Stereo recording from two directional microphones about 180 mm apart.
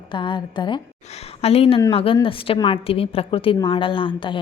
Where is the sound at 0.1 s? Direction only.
25° left (ahead or behind).